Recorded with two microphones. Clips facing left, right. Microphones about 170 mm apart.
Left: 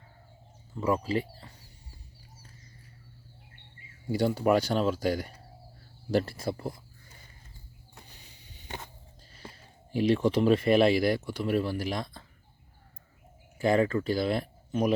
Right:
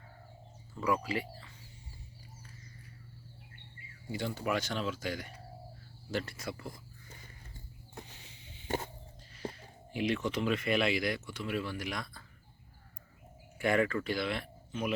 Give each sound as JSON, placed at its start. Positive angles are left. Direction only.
{"t": 0.7, "sound": "speech", "side_deg": 25}
{"t": 4.4, "sound": "speech", "side_deg": 35}
{"t": 9.9, "sound": "speech", "side_deg": 35}
{"t": 13.6, "sound": "speech", "side_deg": 30}